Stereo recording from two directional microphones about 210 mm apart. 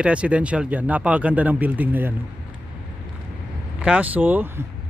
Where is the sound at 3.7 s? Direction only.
5° right (ahead or behind).